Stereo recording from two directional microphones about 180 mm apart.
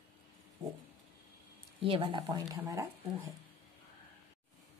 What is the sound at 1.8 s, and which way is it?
A woman's voice, 30° right (ahead or behind).